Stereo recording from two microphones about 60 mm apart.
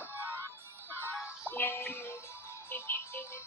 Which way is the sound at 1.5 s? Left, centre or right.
Left.